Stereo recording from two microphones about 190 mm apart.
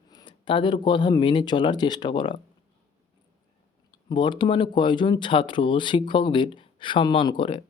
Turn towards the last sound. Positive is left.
turn(degrees=25)  # may be behind; listen again after turning